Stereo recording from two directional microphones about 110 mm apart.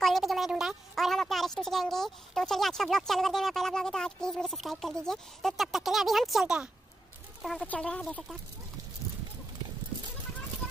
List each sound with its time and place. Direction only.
0.0 s a woman's voice: centre (ahead or behind)
7.6 s speech: 10° left (ahead or behind)